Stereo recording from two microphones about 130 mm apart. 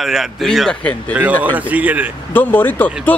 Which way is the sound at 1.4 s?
10° right (ahead or behind).